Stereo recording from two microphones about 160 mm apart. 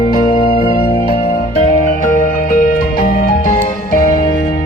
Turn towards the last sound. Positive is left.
turn(degrees=55)  # may be behind; listen again after turning